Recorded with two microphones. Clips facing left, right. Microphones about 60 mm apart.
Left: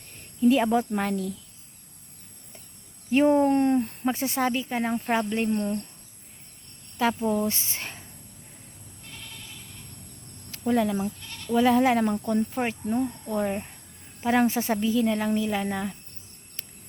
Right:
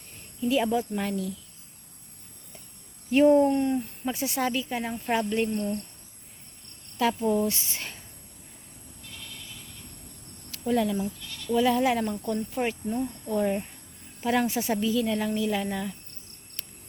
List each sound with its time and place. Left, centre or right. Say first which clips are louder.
0.2 s speech: left 5 dB; left
3.1 s speech: right 1 dB; left
3.5 s speech: left 4 dB; left
5.0 s speech: left 1 dB; left
6.9 s speech: even; left
10.5 s speech: left 1 dB; left
13.4 s speech: right 2 dB; centre
14.3 s speech: left 3 dB; left